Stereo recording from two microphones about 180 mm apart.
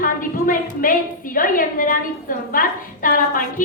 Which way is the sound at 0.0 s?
50° left (ahead or behind).